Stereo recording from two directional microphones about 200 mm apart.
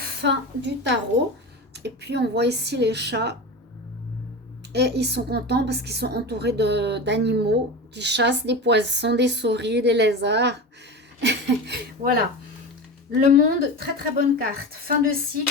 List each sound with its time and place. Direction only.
0.2 s a woman's voice: 60° right (ahead or behind)
4.7 s a woman's voice: 55° right (ahead or behind)